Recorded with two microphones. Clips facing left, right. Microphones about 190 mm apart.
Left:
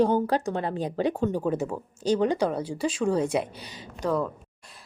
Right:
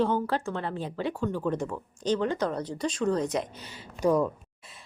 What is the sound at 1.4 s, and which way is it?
Speech, 10° left (ahead or behind).